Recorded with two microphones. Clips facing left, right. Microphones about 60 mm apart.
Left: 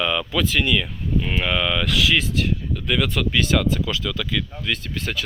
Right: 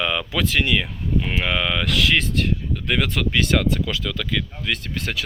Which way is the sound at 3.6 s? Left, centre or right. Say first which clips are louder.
Even; right.